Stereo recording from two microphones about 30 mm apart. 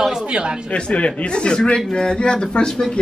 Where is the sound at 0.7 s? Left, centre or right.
Left.